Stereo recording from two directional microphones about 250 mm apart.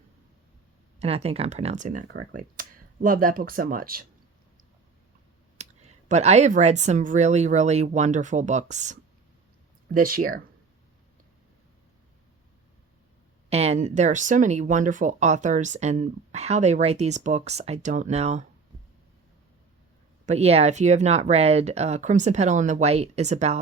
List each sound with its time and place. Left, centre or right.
0.9 s speech: right
5.5 s speech: right
13.5 s speech: right
20.2 s speech: right